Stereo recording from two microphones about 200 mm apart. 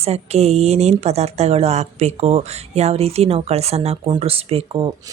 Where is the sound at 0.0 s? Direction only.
30° right (ahead or behind).